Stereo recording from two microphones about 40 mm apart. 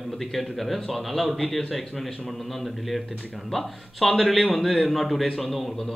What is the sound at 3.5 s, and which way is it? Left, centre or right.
Speech, centre.